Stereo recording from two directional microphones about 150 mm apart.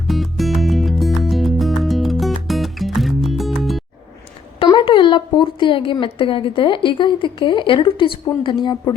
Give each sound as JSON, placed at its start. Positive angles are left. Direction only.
{"t": 0.1, "sound": "music", "side_deg": 0}
{"t": 4.6, "sound": "speech", "side_deg": 35}